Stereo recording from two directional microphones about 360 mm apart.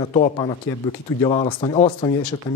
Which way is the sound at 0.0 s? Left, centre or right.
Centre.